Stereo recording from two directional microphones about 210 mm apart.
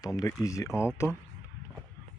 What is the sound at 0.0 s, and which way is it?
Speech, 15° left (ahead or behind).